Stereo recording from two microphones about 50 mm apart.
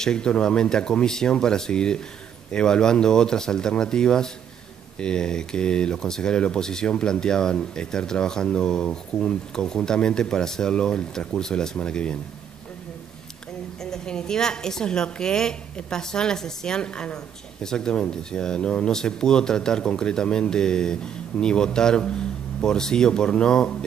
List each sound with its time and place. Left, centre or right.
0.0 s speech: centre
13.8 s speech: centre